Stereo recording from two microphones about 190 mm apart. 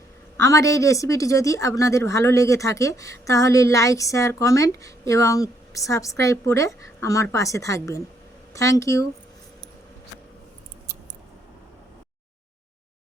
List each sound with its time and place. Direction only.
0.3 s speech: 15° left (ahead or behind)